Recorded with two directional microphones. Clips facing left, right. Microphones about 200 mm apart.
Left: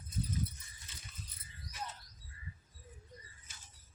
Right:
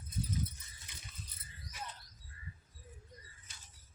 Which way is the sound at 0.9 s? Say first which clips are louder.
Even; 15° right (ahead or behind).